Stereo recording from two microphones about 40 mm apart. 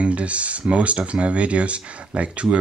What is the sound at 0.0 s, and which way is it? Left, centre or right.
Speech, right.